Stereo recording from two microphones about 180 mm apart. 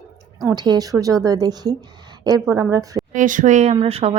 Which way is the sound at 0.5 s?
20° right (ahead or behind).